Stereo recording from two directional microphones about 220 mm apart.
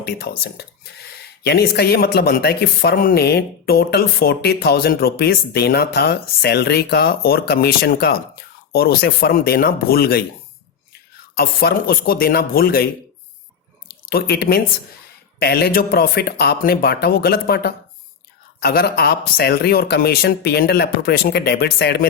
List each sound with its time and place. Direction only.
0.0 s speech: 45° left (ahead or behind)
11.3 s speech: 45° left (ahead or behind)